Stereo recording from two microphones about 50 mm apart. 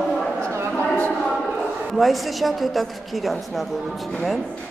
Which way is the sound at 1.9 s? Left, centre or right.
Centre.